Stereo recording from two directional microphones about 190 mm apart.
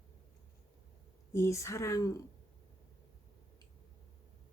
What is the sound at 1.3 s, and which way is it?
Speech, 15° left (ahead or behind).